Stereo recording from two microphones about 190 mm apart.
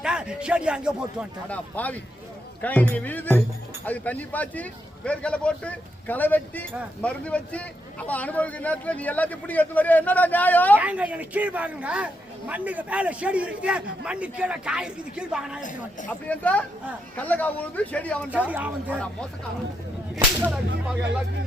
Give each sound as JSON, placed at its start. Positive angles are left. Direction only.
{"t": 0.0, "sound": "speech", "side_deg": -5}
{"t": 1.5, "sound": "a man's voice", "side_deg": 10}
{"t": 10.8, "sound": "a man's voice", "side_deg": -5}
{"t": 16.3, "sound": "a man's voice", "side_deg": 5}
{"t": 18.3, "sound": "a man's voice", "side_deg": -10}
{"t": 18.9, "sound": "speech", "side_deg": 5}
{"t": 20.1, "sound": "whip", "side_deg": -5}